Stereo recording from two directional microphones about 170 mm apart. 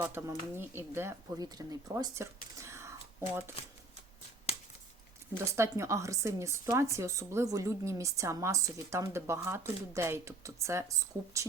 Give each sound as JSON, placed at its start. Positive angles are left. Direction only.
{"t": 0.0, "sound": "speech", "side_deg": -15}
{"t": 5.5, "sound": "speech", "side_deg": -15}